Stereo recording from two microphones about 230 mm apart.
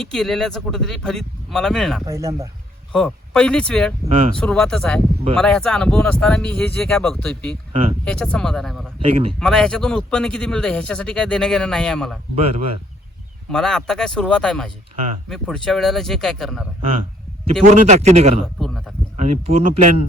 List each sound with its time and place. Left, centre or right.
0.0 s a man's voice: centre
2.0 s speech: centre
2.9 s a man's voice: centre
7.7 s speech: right
8.0 s a man's voice: centre
9.0 s speech: right
9.4 s a man's voice: centre
12.4 s speech: right
13.5 s a man's voice: centre
17.4 s speech: right
18.6 s speech: centre
19.1 s speech: right